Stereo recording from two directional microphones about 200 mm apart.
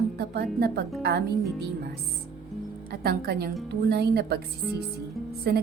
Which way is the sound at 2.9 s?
55° right (ahead or behind).